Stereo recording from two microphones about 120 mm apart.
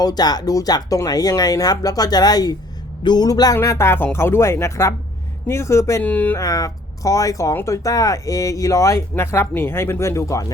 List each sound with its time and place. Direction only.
0.0 s speech: 35° left (ahead or behind); by 6.3 s 15° left (ahead or behind)
6.3 s speech: 30° left (ahead or behind)